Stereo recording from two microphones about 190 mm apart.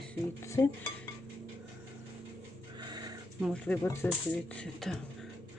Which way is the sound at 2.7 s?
20° right (ahead or behind).